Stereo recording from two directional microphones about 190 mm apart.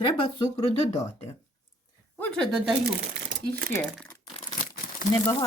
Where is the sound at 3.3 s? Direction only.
60° right (ahead or behind).